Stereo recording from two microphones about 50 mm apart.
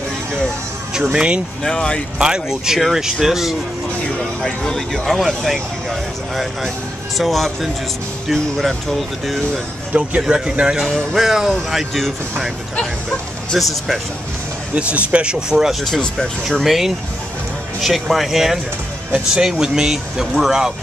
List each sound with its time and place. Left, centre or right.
1.1 s speech: right
1.6 s speech: centre
2.1 s speech: centre
4.2 s speech: centre
10.2 s speech: centre
13.6 s speech: centre
14.8 s speech: right
15.7 s speech: centre
19.1 s speech: centre